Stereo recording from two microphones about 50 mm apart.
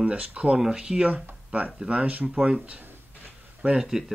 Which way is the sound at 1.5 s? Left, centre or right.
Right.